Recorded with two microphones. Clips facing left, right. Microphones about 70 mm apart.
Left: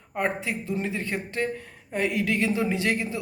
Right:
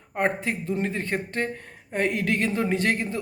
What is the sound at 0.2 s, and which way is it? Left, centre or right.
A woman's voice, right.